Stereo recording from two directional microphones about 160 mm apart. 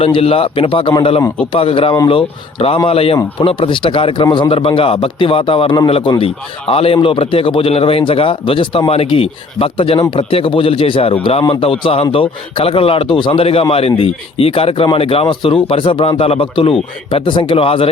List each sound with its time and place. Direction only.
0.0 s a man's voice: 35° left (ahead or behind)